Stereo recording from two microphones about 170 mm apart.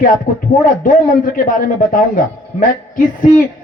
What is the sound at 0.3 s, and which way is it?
A man's voice, 50° left (ahead or behind).